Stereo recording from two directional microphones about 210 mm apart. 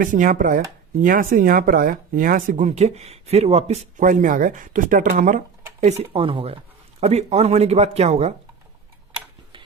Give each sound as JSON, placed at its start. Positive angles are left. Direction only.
{"t": 0.0, "sound": "speech", "side_deg": -40}